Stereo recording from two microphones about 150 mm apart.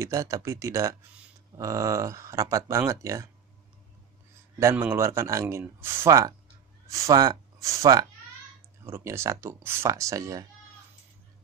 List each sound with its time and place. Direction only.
0.0 s speech: 20° right (ahead or behind)
4.6 s speech: 15° right (ahead or behind)